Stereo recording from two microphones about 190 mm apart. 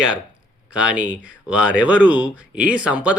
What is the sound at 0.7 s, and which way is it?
Speech, 5° right (ahead or behind).